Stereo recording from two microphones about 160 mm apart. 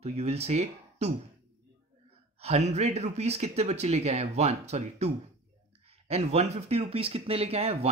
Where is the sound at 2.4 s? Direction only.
45° right (ahead or behind).